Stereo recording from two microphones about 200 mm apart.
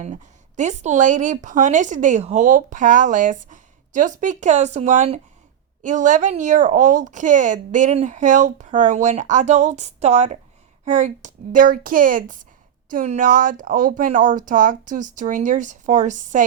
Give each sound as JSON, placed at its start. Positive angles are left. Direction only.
{"t": 0.0, "sound": "speech", "side_deg": -35}